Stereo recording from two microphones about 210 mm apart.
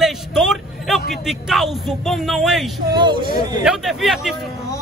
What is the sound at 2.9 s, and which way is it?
Speech, 20° right (ahead or behind).